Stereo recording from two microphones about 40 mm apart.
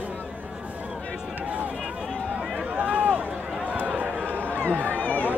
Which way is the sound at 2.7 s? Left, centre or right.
Right.